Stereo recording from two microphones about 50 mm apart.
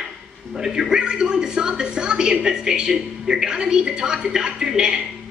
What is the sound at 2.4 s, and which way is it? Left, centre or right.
A woman's voice, centre.